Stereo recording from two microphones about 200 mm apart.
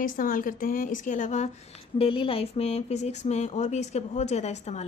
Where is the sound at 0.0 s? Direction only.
45° left (ahead or behind).